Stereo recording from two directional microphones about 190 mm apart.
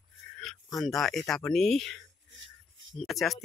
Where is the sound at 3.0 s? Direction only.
Centre (ahead or behind).